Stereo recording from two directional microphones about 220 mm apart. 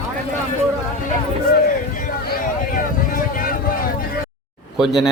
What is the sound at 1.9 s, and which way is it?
Vehicle, 40° left (ahead or behind).